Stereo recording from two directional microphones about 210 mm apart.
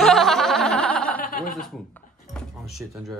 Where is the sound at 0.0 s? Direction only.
Centre (ahead or behind).